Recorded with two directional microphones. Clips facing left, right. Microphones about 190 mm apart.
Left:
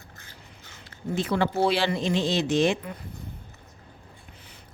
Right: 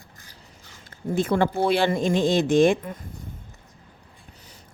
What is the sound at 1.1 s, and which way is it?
Speech, 50° right (ahead or behind).